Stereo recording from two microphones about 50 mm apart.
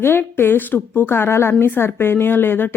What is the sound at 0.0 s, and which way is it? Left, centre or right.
A woman's voice, left.